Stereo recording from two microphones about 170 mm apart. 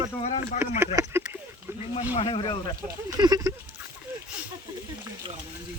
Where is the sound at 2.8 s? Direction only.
20° right (ahead or behind).